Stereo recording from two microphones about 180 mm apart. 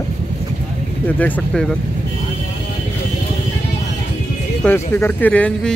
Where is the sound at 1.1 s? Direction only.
10° left (ahead or behind).